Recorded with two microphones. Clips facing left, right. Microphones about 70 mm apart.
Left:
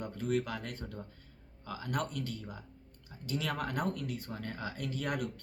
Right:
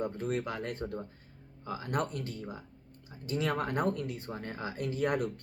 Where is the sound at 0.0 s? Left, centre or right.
Right.